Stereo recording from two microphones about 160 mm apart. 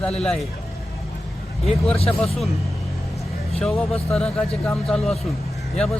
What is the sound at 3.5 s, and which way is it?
Speech, 5° left (ahead or behind).